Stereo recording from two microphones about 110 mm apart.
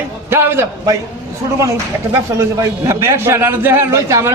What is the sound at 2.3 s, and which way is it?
A man's voice, 25° right (ahead or behind).